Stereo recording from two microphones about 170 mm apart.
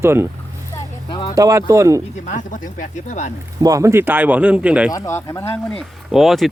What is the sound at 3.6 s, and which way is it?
A man's voice, 20° right (ahead or behind).